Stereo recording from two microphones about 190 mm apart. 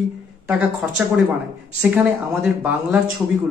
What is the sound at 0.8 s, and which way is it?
A woman's voice, 10° right (ahead or behind).